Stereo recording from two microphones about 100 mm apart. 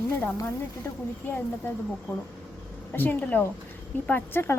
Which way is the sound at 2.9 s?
15° left (ahead or behind).